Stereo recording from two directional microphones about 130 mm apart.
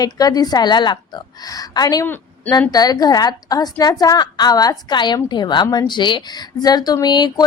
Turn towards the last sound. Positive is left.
turn(degrees=35)  # may be behind; listen again after turning